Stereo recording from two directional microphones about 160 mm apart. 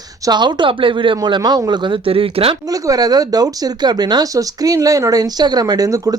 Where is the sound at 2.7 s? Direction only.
20° right (ahead or behind).